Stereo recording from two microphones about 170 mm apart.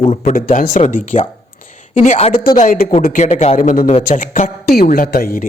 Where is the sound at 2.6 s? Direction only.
55° left (ahead or behind).